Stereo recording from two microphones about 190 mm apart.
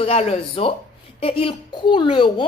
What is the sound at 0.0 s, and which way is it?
A woman's voice, 30° left (ahead or behind).